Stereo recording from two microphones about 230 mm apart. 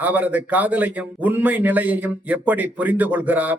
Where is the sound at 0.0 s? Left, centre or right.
Centre.